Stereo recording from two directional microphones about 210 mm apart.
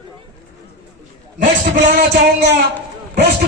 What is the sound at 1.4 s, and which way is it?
Music, 40° right (ahead or behind).